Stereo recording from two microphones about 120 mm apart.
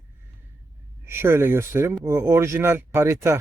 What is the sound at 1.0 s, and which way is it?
Speech, 20° right (ahead or behind).